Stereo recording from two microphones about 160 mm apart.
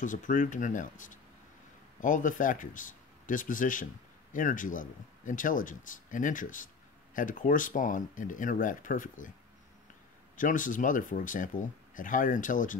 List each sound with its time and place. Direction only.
0.0 s speech: 55° left (ahead or behind)
10.3 s speech: 55° left (ahead or behind)